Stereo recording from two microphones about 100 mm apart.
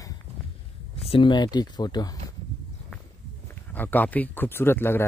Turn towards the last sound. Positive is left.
turn(degrees=25)  # may be behind; listen again after turning